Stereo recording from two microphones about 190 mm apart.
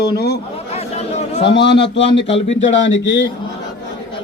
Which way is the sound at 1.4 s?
65° left (ahead or behind).